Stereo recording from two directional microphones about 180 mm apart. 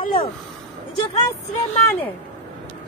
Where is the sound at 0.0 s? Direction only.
55° left (ahead or behind).